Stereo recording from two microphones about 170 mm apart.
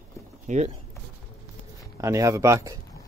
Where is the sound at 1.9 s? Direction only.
20° right (ahead or behind).